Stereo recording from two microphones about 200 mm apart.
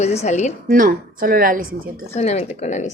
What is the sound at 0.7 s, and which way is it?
Speech, 45° right (ahead or behind).